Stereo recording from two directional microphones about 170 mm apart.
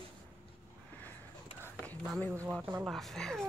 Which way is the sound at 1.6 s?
15° right (ahead or behind).